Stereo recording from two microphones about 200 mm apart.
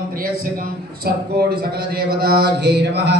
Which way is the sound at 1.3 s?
50° right (ahead or behind).